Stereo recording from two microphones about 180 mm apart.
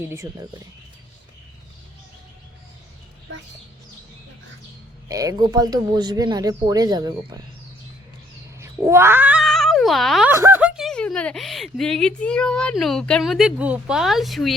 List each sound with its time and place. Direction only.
0.0 s speech: 15° right (ahead or behind)
5.0 s speech: 20° right (ahead or behind)
8.5 s cat: 15° right (ahead or behind); by 10.2 s centre (ahead or behind)
10.2 s speech: 15° right (ahead or behind)